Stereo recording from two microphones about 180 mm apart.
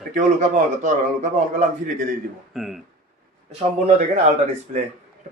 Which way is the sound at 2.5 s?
Centre (ahead or behind).